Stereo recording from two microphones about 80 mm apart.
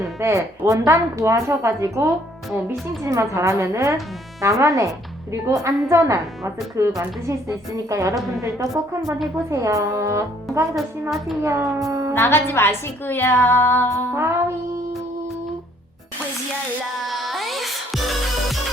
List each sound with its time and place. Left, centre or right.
0.2 s a woman's voice: right
9.0 s a woman's voice: centre
9.5 s a woman's voice: right
11.9 s a woman's voice: right
12.1 s a woman's voice: left
14.1 s a woman's voice: right
17.1 s music: centre